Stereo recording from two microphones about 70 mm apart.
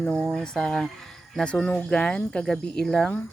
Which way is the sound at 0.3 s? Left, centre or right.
Centre.